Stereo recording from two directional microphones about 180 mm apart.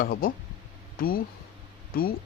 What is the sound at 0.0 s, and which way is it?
A man's voice, 50° left (ahead or behind).